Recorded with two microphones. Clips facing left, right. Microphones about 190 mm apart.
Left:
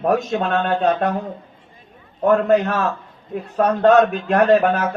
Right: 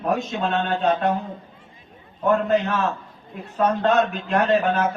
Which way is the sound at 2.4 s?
55° left (ahead or behind).